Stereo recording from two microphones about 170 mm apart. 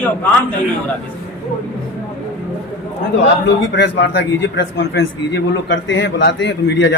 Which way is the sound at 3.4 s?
90° left.